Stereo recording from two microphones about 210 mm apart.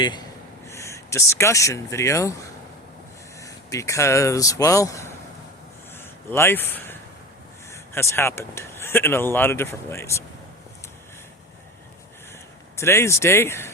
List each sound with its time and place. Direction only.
0.0 s speech: 20° left (ahead or behind)
6.0 s a sound: 10° left (ahead or behind)
7.7 s speech: 10° left (ahead or behind)
12.7 s speech: 15° left (ahead or behind)